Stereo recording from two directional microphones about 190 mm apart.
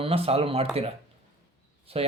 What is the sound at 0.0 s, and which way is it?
Speech, 30° right (ahead or behind).